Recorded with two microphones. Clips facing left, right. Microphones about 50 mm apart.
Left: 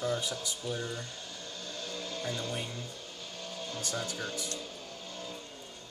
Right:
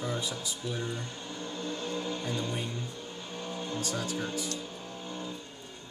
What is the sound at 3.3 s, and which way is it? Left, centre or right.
Music, right.